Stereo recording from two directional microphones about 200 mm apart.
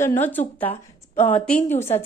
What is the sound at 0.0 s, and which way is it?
Speech, 10° left (ahead or behind).